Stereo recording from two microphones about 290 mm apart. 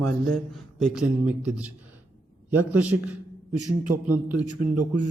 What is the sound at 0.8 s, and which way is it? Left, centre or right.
A man's voice, centre.